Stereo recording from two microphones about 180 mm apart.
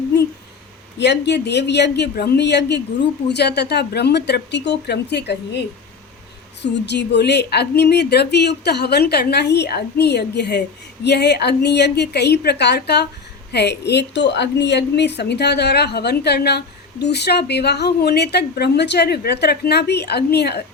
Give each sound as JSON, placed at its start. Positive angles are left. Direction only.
{"t": 0.9, "sound": "speech", "side_deg": 70}
{"t": 6.6, "sound": "a woman's voice", "side_deg": 70}